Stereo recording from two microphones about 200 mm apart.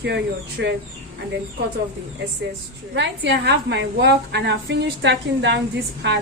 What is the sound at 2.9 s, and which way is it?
A woman's voice, 60° right (ahead or behind).